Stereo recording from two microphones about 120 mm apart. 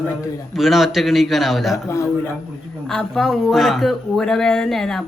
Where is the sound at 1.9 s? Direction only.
25° left (ahead or behind).